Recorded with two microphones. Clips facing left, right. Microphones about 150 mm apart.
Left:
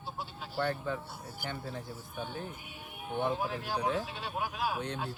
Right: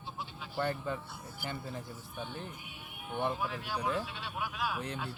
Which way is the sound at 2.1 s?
50° left (ahead or behind).